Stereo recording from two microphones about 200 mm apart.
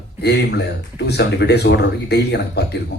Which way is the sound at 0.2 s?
55° left (ahead or behind).